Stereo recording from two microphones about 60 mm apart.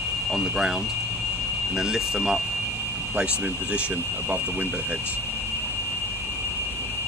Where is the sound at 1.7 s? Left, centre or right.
Centre.